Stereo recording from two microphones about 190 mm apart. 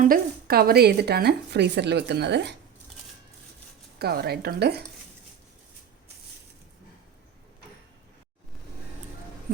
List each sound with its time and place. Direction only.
0.0 s a woman's voice: 50° right (ahead or behind)
3.9 s a woman's voice: 55° right (ahead or behind)